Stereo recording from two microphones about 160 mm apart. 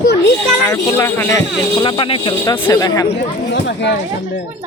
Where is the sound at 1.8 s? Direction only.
30° left (ahead or behind).